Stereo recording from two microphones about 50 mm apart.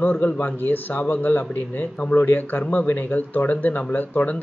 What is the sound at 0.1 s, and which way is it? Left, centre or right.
Speech, left.